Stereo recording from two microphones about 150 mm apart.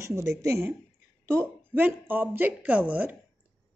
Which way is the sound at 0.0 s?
20° right (ahead or behind).